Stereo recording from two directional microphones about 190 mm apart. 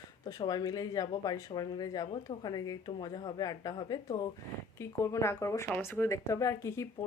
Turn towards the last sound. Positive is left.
turn(degrees=15)  # may be behind; listen again after turning